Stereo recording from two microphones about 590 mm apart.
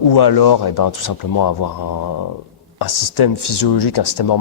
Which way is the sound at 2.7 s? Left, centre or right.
Left.